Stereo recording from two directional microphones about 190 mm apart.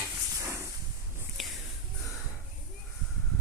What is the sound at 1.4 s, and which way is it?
Whispering, centre (ahead or behind).